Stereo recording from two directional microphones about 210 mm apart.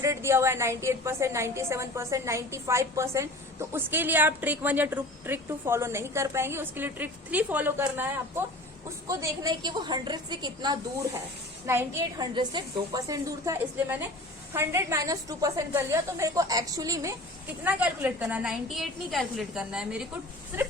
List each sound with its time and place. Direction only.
0.0 s a woman's voice: 15° right (ahead or behind)